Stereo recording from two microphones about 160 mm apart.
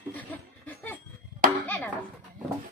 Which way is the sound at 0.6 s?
10° left (ahead or behind).